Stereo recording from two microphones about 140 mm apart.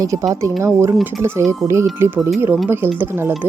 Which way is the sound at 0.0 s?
25° right (ahead or behind).